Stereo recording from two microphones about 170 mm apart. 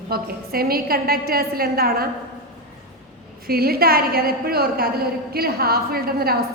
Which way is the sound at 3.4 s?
65° right (ahead or behind).